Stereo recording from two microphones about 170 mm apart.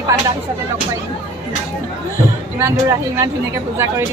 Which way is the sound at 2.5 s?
15° right (ahead or behind).